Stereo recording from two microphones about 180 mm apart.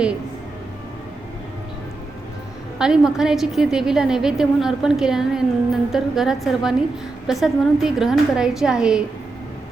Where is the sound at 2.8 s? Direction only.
5° right (ahead or behind).